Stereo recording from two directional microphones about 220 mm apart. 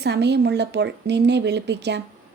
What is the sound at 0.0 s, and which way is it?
Speech, 50° right (ahead or behind).